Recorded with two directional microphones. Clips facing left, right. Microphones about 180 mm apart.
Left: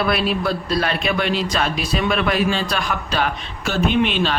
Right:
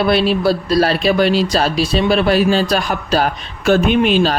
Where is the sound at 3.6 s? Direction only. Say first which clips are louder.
Right 6 dB; 55° right (ahead or behind).